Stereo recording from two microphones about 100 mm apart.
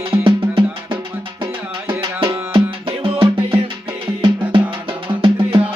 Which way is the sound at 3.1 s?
60° right (ahead or behind).